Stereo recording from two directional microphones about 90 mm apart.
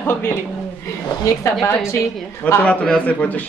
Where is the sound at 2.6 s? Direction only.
10° left (ahead or behind).